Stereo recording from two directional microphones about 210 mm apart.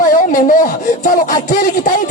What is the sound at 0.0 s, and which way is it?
Speech, 40° left (ahead or behind).